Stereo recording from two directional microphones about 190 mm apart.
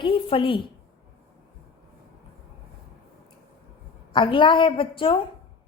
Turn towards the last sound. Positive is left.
turn(degrees=25)  # may be behind; listen again after turning